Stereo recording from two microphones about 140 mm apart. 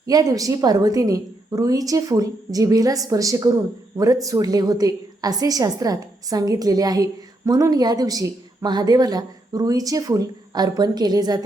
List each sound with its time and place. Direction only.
0.1 s a woman's voice: 25° right (ahead or behind)